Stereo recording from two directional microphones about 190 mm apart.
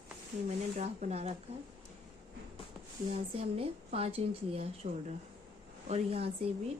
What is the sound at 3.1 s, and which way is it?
A woman's voice, 30° right (ahead or behind).